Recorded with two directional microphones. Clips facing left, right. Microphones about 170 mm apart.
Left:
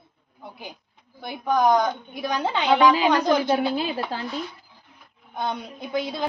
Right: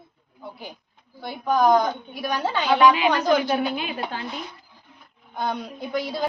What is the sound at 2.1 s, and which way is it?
A woman's voice, 20° left (ahead or behind).